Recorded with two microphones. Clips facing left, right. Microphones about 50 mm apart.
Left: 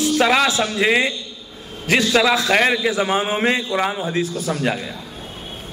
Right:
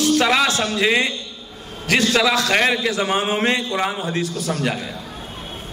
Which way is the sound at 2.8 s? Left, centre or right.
Centre.